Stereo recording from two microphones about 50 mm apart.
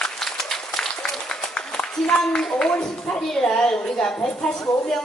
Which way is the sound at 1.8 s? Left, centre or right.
Left.